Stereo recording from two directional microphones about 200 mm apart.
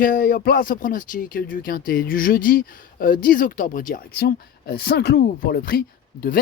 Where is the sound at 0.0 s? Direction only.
45° left (ahead or behind).